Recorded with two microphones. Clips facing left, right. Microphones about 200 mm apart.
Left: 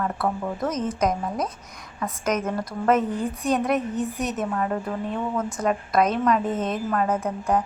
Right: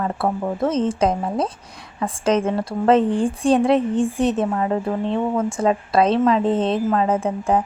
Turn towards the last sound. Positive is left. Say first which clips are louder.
# right 4 dB
turn(degrees=-25)  # may be behind; listen again after turning